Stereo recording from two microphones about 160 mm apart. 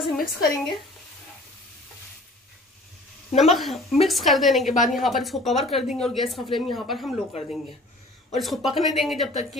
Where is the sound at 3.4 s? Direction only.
Centre (ahead or behind).